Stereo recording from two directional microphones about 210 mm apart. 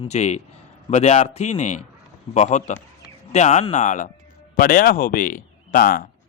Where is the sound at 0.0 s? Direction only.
30° left (ahead or behind).